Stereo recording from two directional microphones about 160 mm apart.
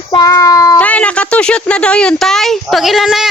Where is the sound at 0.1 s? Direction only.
20° left (ahead or behind).